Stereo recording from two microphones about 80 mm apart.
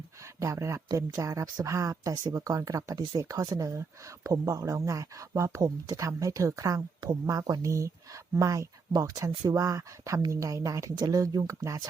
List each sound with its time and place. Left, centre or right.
0.3 s speech: right